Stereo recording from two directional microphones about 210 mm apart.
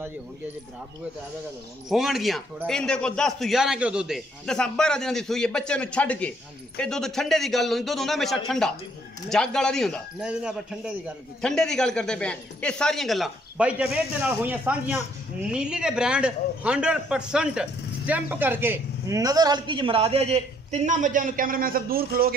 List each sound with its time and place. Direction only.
1.9 s a man's voice: centre (ahead or behind); by 22.3 s 45° right (ahead or behind)